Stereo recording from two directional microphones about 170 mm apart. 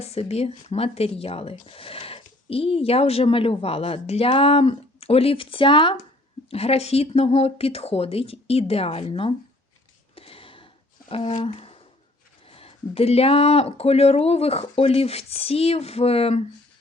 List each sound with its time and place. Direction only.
0.0 s speech: 40° left (ahead or behind)
10.2 s a sound: 35° left (ahead or behind)
11.1 s speech: 35° left (ahead or behind)